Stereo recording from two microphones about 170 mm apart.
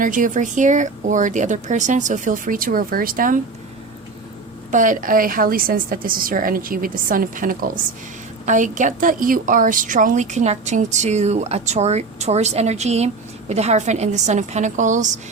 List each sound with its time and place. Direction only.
0.0 s speech: 50° right (ahead or behind)
4.7 s a woman's voice: 50° right (ahead or behind)